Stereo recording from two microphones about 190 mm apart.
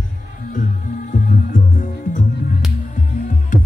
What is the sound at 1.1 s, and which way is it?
Music, 40° left (ahead or behind).